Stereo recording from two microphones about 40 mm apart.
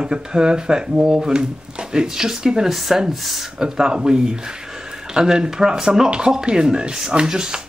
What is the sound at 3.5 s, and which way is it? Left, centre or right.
A man's voice, centre.